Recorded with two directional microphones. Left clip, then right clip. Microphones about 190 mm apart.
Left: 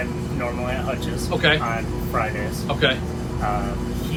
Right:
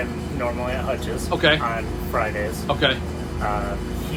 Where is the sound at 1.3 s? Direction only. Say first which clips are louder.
Right 1 dB; 15° right (ahead or behind).